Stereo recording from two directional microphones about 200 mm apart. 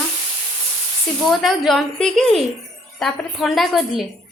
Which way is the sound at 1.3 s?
Centre (ahead or behind).